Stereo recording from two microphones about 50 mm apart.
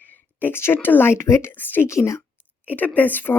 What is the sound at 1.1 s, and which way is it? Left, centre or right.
Speech, left.